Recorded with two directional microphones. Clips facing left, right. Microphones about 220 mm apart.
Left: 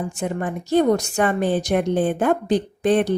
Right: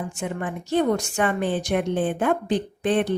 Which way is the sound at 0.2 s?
40° left (ahead or behind).